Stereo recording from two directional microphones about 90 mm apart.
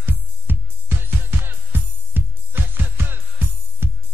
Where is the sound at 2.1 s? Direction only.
20° right (ahead or behind).